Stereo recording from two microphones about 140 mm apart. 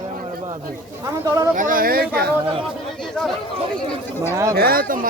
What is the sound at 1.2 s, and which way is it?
Speech, 25° right (ahead or behind).